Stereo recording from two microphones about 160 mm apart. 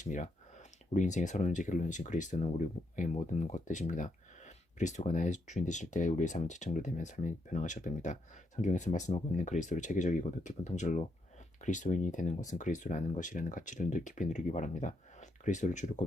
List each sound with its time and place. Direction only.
0.0 s speech: 50° left (ahead or behind)